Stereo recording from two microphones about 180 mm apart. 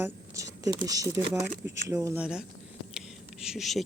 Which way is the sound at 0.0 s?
20° right (ahead or behind).